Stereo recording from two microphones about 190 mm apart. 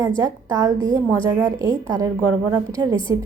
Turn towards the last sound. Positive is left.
turn(degrees=-20)  # may be behind; listen again after turning